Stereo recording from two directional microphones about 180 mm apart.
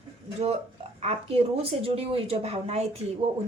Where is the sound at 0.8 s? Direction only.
35° right (ahead or behind).